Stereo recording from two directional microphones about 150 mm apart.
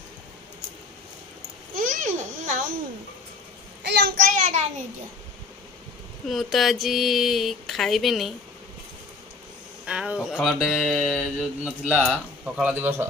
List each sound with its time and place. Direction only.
1.8 s babbling: 60° right (ahead or behind)
3.9 s child singing: 80° right; by 4.6 s 55° right (ahead or behind)
6.2 s music: centre (ahead or behind)
9.8 s music: 5° right (ahead or behind)
12.7 s a man's voice: 15° right (ahead or behind)